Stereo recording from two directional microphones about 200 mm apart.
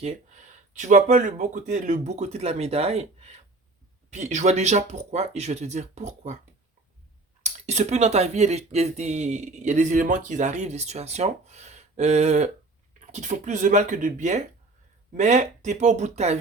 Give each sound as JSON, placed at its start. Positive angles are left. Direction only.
{"t": 0.7, "sound": "speech", "side_deg": -35}
{"t": 4.1, "sound": "speech", "side_deg": -35}
{"t": 7.4, "sound": "speech", "side_deg": -35}